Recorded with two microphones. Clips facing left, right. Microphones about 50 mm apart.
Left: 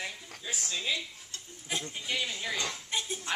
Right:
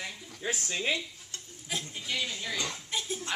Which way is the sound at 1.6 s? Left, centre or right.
Centre.